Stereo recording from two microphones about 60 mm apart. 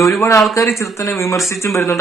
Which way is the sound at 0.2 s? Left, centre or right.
Left.